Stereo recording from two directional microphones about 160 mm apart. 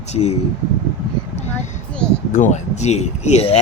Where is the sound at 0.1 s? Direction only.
40° left (ahead or behind).